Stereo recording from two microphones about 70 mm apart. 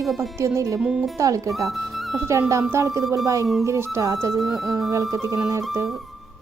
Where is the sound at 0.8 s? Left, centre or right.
Centre.